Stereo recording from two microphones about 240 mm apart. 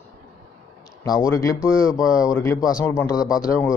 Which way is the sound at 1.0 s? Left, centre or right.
Centre.